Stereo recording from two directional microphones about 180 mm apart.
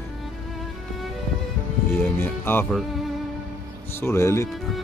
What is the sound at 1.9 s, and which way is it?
Speech, 10° left (ahead or behind).